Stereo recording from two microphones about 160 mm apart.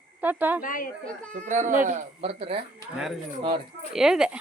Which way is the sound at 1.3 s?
50° right (ahead or behind).